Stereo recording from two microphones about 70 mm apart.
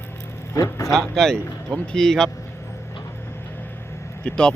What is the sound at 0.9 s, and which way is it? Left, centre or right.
Speech, centre.